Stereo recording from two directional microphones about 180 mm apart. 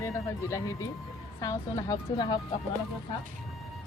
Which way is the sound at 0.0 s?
15° left (ahead or behind).